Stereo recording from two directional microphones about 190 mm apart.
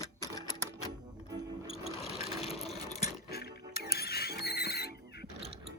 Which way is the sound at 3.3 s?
55° left (ahead or behind).